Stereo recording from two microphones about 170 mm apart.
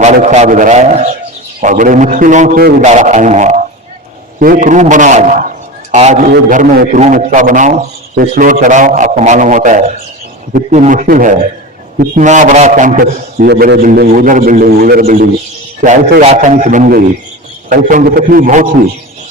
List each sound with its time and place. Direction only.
0.0 s a man's voice: 45° right (ahead or behind)
2.8 s a man's voice: 45° right (ahead or behind)
4.4 s a man's voice: 55° right (ahead or behind)
16.2 s a man's voice: 40° right (ahead or behind)